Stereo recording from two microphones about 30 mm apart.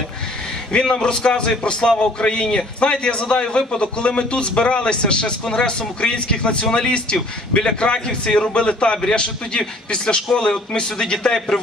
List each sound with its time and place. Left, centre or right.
0.8 s a man's voice: left